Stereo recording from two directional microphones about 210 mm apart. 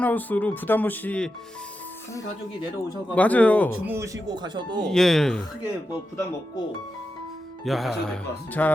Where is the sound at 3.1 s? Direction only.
5° left (ahead or behind).